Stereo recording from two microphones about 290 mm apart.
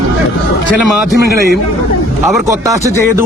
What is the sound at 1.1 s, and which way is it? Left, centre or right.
Speech, left.